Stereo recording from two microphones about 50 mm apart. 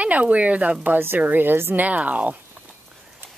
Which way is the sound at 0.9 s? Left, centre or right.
Right.